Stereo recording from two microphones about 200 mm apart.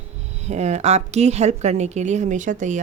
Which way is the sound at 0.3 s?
35° right (ahead or behind).